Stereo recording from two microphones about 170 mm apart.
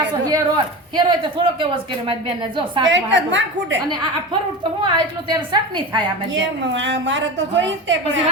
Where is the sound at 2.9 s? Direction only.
90° right.